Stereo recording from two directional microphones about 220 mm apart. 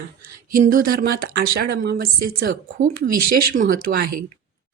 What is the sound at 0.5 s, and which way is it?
Speech, 40° right (ahead or behind).